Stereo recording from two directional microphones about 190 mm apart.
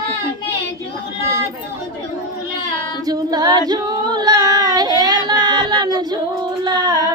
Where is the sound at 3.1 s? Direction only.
20° right (ahead or behind).